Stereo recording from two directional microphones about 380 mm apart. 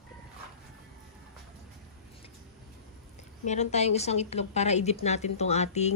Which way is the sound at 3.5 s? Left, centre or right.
Centre.